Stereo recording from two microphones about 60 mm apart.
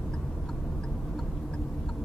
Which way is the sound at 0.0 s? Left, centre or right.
Centre.